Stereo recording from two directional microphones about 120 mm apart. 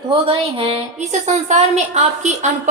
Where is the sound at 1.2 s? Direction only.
75° right (ahead or behind).